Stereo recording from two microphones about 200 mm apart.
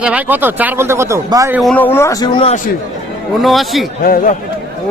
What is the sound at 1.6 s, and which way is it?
Speech, 5° left (ahead or behind).